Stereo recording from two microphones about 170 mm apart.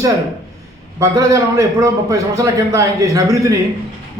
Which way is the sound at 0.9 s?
20° right (ahead or behind).